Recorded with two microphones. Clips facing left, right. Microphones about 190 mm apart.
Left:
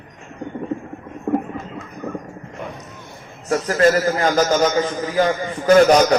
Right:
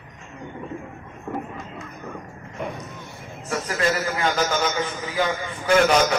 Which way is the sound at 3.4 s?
40° left (ahead or behind).